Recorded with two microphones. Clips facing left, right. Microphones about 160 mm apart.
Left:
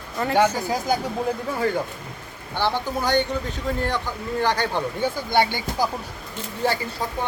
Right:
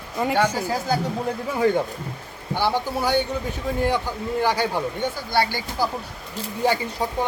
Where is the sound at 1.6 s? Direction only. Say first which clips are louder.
Right 7 dB; 20° right (ahead or behind).